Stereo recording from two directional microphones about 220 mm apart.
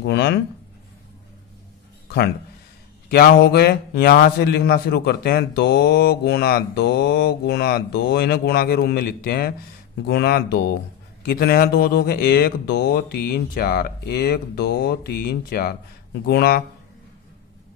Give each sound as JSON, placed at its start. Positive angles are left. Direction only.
{"t": 0.0, "sound": "a man's voice", "side_deg": 50}
{"t": 3.1, "sound": "a man's voice", "side_deg": 45}